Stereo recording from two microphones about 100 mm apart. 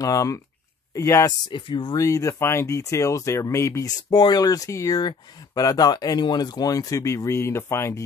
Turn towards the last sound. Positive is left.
turn(degrees=30)  # may be behind; listen again after turning